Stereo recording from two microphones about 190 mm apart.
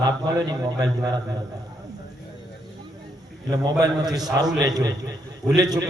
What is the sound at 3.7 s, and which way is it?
A man's voice, 20° right (ahead or behind).